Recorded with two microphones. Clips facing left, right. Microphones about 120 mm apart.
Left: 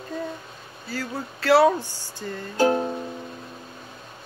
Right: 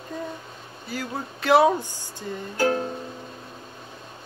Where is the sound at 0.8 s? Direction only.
20° right (ahead or behind).